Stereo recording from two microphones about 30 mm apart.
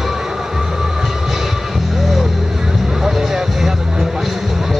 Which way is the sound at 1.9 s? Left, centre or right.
Centre.